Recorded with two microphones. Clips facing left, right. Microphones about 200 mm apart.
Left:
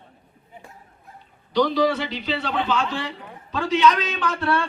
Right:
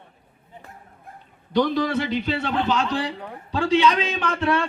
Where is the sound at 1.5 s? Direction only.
50° right (ahead or behind).